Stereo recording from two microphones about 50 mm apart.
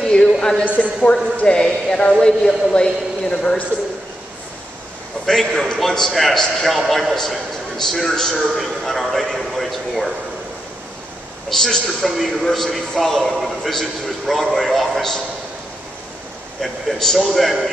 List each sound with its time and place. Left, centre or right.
0.0 s a sound: centre
1.3 s a man's voice: centre
5.2 s a man's voice: centre
8.4 s a man's voice: centre
11.6 s a man's voice: centre
16.6 s a man's voice: centre